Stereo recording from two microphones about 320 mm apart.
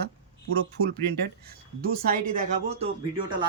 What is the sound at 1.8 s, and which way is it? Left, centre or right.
Speech, right.